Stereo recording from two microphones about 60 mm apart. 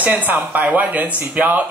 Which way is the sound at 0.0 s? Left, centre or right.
Right.